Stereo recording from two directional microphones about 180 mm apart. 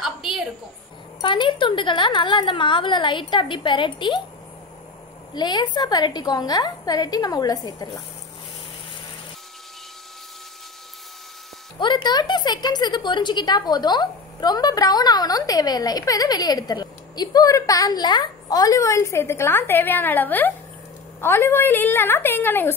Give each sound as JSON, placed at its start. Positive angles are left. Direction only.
{"t": 0.0, "sound": "a sound", "side_deg": 0}
{"t": 1.2, "sound": "a woman's voice", "side_deg": 25}
{"t": 5.3, "sound": "a woman's voice", "side_deg": 25}
{"t": 11.8, "sound": "a woman's voice", "side_deg": 25}